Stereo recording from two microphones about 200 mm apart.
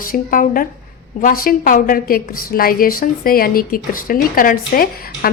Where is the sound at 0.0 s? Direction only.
45° left (ahead or behind).